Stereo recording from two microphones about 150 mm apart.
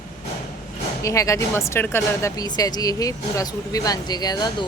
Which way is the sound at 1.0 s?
20° left (ahead or behind).